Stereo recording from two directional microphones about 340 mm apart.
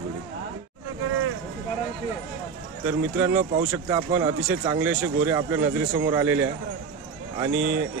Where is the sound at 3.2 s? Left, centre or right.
Centre.